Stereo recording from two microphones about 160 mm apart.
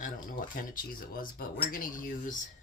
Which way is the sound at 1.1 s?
65° left (ahead or behind).